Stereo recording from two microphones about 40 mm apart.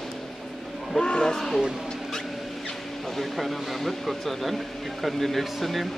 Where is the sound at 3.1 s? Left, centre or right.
Centre.